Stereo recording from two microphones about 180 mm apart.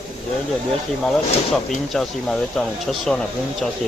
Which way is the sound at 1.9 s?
5° left (ahead or behind).